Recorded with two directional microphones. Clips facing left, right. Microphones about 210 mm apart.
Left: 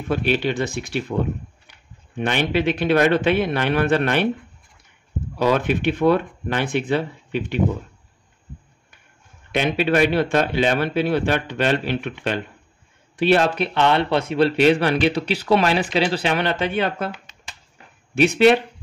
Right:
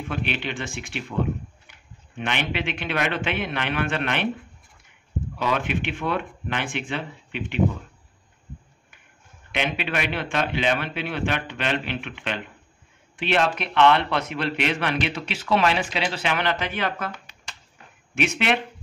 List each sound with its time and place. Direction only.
0.1 s a man's voice: 40° left (ahead or behind)
2.1 s a man's voice: 40° left (ahead or behind)
5.4 s a man's voice: 40° left (ahead or behind)
9.5 s a man's voice: 40° left (ahead or behind)
18.1 s a man's voice: 35° left (ahead or behind)